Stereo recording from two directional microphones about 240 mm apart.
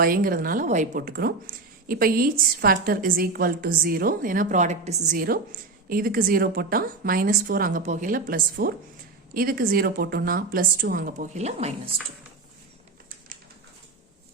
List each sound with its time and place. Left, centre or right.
0.0 s a woman's voice: right